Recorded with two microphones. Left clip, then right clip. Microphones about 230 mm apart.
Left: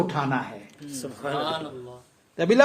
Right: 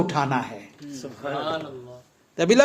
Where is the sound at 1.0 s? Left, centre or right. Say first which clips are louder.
Left 1 dB; left.